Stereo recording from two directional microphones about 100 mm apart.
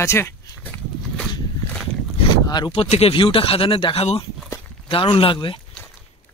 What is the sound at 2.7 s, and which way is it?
Speech, 85° left.